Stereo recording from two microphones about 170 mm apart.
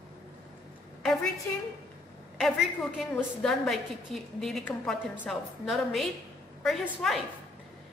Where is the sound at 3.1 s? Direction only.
5° left (ahead or behind).